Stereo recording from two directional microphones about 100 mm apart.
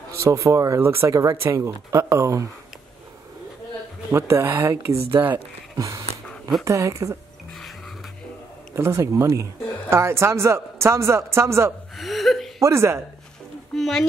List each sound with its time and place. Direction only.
0.1 s speech: 30° right (ahead or behind)
4.1 s speech: 25° right (ahead or behind)
5.8 s a sound: 35° right (ahead or behind)
6.6 s speech: 30° right (ahead or behind)
8.7 s speech: 30° right (ahead or behind)
12.0 s whimper: centre (ahead or behind)
12.5 s speech: 30° right (ahead or behind)
13.7 s speech: 5° left (ahead or behind)